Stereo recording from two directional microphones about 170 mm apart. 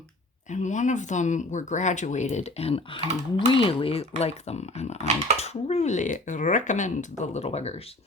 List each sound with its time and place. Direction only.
0.5 s speech: 45° left (ahead or behind)